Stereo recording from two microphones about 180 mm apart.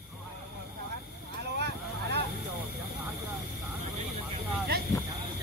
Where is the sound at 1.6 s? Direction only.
65° right (ahead or behind).